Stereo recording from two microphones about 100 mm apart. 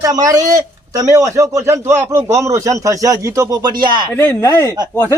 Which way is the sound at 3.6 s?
45° right (ahead or behind).